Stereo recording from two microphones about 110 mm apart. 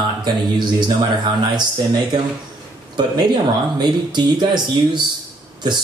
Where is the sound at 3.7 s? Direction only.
40° right (ahead or behind).